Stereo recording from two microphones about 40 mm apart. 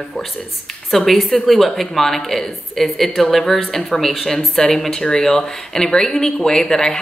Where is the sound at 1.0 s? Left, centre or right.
Centre.